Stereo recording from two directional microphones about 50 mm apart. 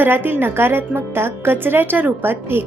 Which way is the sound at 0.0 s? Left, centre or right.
Right.